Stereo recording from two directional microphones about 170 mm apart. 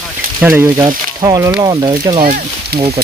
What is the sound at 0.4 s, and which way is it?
Speech, 15° right (ahead or behind).